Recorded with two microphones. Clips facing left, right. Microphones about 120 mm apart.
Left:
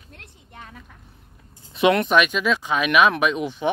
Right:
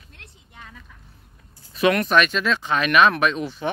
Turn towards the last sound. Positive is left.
turn(degrees=15)  # may be behind; listen again after turning